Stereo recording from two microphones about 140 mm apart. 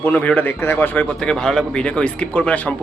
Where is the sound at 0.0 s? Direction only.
10° left (ahead or behind).